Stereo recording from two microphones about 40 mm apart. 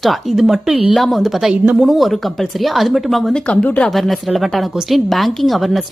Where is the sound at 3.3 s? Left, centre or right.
Left.